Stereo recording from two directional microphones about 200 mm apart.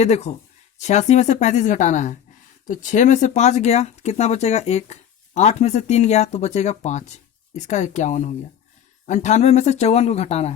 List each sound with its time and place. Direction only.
0.0 s speech: 35° left (ahead or behind)